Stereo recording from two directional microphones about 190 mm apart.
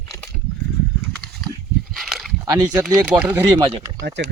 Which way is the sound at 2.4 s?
20° right (ahead or behind).